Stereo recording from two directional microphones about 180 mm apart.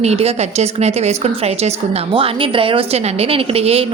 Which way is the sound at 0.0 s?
35° right (ahead or behind).